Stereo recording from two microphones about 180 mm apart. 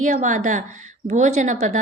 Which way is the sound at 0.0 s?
45° right (ahead or behind).